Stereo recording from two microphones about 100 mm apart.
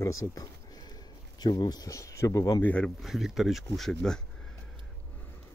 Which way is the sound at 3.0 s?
5° right (ahead or behind).